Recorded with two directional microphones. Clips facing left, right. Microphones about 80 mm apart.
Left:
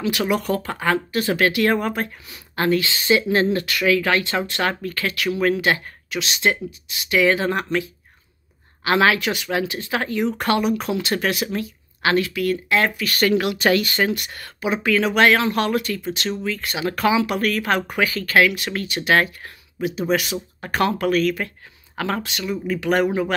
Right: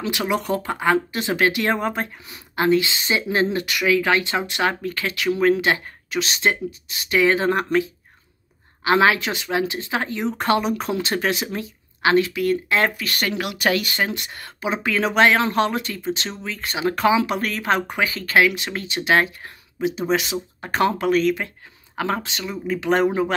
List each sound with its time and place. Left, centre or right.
0.1 s speech: right
6.0 s speech: right
13.2 s speech: centre